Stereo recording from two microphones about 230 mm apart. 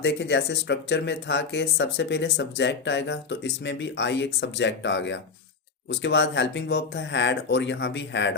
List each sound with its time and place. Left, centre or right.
0.0 s speech: left